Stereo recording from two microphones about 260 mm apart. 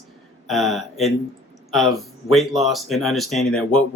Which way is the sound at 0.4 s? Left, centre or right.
Centre.